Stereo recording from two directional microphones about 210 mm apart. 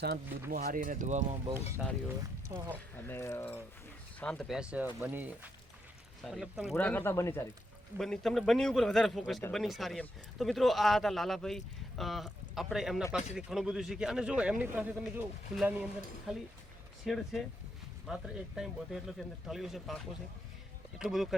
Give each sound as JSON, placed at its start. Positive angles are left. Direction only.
{"t": 0.5, "sound": "speech", "side_deg": -40}
{"t": 2.5, "sound": "speech", "side_deg": -20}
{"t": 3.1, "sound": "speech", "side_deg": 10}
{"t": 21.0, "sound": "speech", "side_deg": 0}